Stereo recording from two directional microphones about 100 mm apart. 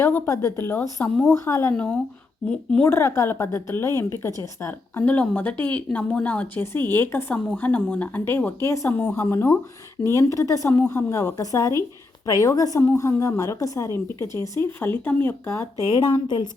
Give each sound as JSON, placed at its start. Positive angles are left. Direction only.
{"t": 0.0, "sound": "speech", "side_deg": 30}
{"t": 1.7, "sound": "speech", "side_deg": 10}
{"t": 2.8, "sound": "speech", "side_deg": 30}
{"t": 5.0, "sound": "a woman's voice", "side_deg": 15}
{"t": 16.0, "sound": "a woman's voice", "side_deg": 45}